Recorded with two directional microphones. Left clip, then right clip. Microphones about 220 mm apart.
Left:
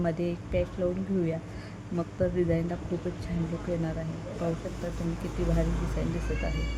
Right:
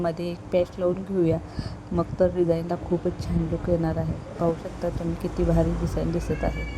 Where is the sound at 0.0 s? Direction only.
20° right (ahead or behind).